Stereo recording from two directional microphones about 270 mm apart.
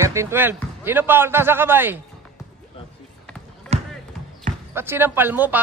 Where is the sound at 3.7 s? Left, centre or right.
Right.